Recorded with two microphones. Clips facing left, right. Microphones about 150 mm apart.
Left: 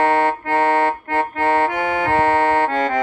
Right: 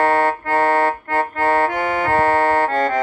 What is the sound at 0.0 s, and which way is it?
Accordion, 40° right (ahead or behind).